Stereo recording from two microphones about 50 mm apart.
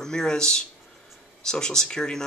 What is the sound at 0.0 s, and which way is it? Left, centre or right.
Speech, centre.